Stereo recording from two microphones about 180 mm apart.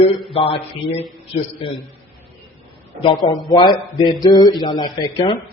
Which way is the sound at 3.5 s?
25° left (ahead or behind).